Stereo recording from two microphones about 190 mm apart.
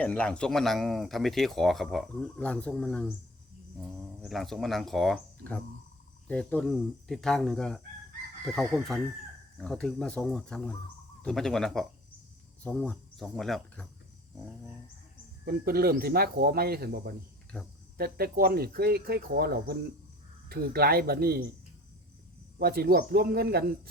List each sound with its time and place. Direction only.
0.0 s speech: 5° left (ahead or behind)
4.2 s speech: centre (ahead or behind)
15.4 s speech: 50° right (ahead or behind)
22.5 s speech: 55° right (ahead or behind)